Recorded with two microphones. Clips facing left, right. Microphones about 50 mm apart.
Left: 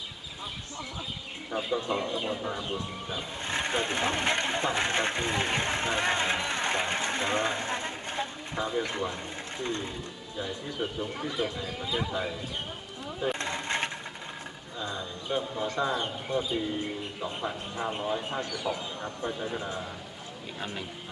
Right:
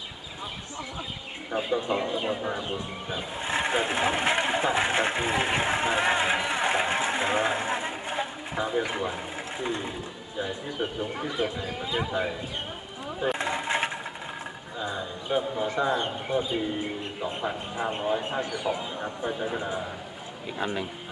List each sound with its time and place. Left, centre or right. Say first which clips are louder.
1.5 s speech: right 3 dB; centre
13.1 s a sound: right 3 dB; centre
14.8 s speech: right 3 dB; centre